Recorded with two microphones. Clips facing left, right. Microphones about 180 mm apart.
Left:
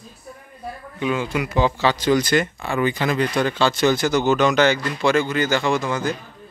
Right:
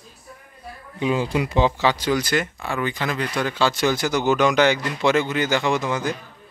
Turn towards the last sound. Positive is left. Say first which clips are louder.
# left 1 dB
turn(degrees=-15)  # may be behind; listen again after turning